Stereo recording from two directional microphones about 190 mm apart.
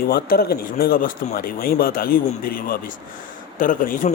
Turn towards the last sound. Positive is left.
turn(degrees=45)  # may be behind; listen again after turning